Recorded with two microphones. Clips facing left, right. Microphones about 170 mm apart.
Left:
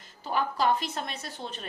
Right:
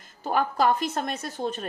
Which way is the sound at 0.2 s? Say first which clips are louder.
Right 4 dB; 50° right (ahead or behind).